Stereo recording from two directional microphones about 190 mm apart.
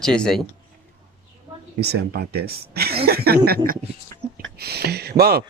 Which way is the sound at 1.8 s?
55° right (ahead or behind).